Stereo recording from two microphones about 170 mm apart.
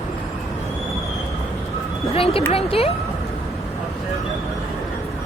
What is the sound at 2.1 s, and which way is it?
Speech, 35° left (ahead or behind).